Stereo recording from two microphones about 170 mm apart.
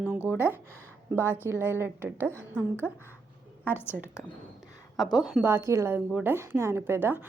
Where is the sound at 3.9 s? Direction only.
5° right (ahead or behind).